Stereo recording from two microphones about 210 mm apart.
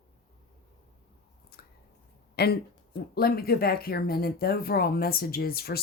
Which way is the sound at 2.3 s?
50° left (ahead or behind).